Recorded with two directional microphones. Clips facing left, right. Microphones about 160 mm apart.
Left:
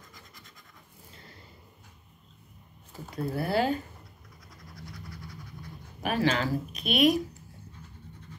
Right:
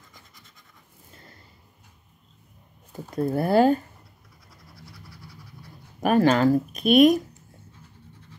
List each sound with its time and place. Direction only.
0.1 s scratch: centre (ahead or behind)
3.1 s speech: 45° right (ahead or behind)
4.5 s a sound: centre (ahead or behind)
5.9 s speech: 50° right (ahead or behind)